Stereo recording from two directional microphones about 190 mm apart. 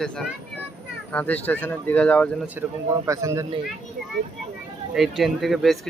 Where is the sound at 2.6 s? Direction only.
10° right (ahead or behind).